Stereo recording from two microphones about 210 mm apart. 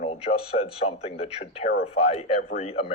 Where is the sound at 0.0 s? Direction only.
30° left (ahead or behind).